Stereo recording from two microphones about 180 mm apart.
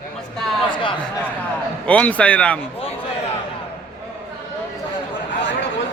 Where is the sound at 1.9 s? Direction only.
5° left (ahead or behind).